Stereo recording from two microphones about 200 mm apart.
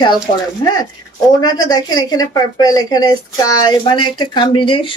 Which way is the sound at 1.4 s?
20° left (ahead or behind).